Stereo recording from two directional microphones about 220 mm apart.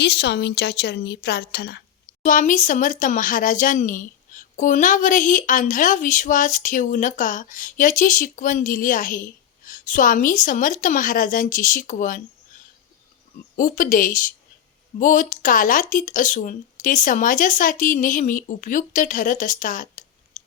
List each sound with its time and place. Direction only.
0.0 s a woman's voice: 50° left (ahead or behind)
2.2 s speech: 35° left (ahead or behind)
13.6 s speech: 40° left (ahead or behind)
20.4 s chewing: 35° left (ahead or behind)